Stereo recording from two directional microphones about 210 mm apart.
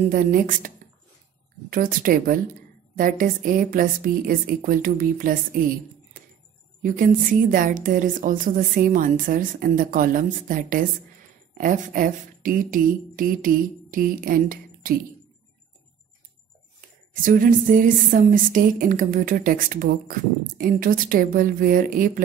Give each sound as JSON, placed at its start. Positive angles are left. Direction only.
{"t": 0.1, "sound": "speech", "side_deg": -40}
{"t": 1.7, "sound": "speech", "side_deg": -40}
{"t": 6.8, "sound": "speech", "side_deg": -40}
{"t": 17.1, "sound": "speech", "side_deg": -40}